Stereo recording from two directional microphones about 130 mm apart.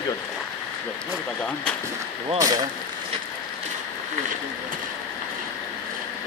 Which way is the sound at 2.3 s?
25° right (ahead or behind).